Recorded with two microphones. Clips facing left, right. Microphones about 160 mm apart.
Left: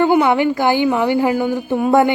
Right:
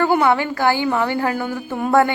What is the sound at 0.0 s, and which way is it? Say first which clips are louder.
A woman's voice: left 3 dB; 15° left (ahead or behind).